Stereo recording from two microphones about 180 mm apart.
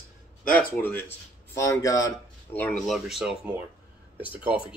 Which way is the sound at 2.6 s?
Centre (ahead or behind).